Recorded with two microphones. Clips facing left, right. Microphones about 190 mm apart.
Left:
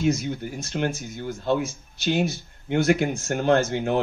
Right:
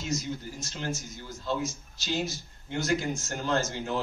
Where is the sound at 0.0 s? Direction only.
60° left (ahead or behind).